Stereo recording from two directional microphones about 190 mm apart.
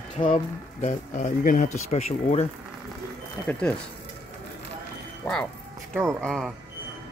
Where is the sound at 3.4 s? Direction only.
10° left (ahead or behind).